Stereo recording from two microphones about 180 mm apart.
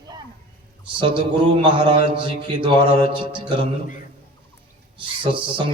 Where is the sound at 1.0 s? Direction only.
30° right (ahead or behind).